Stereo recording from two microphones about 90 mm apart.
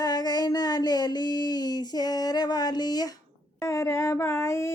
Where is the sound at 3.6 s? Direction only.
35° left (ahead or behind).